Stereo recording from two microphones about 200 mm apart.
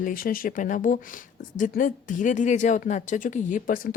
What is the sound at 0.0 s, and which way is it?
Speech, 45° left (ahead or behind).